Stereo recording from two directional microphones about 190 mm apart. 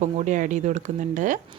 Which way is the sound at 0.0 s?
40° right (ahead or behind).